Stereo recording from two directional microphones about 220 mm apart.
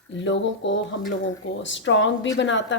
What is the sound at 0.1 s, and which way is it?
Speech, 55° left (ahead or behind).